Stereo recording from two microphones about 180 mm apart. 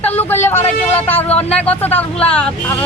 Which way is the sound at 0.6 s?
35° left (ahead or behind).